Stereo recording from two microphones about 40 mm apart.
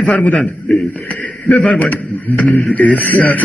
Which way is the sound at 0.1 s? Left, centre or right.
Left.